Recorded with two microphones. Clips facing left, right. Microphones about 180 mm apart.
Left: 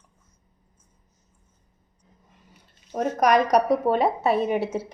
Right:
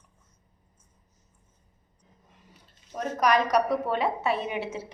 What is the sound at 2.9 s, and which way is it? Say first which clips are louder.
A woman's voice: left 4 dB; 45° left (ahead or behind).